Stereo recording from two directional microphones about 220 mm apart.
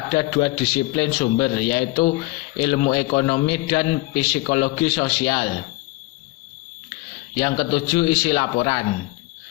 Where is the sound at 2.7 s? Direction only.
30° left (ahead or behind).